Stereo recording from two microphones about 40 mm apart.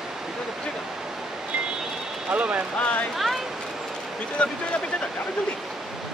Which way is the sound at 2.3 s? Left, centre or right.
Right.